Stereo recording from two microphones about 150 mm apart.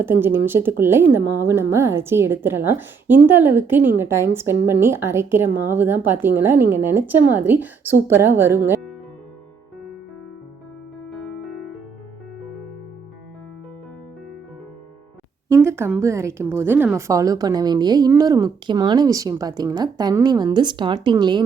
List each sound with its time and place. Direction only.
0.0 s a woman's voice: 15° right (ahead or behind)
11.1 s music: centre (ahead or behind)
15.6 s speech: 15° right (ahead or behind)